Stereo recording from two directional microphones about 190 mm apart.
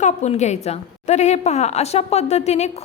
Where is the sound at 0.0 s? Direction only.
35° left (ahead or behind).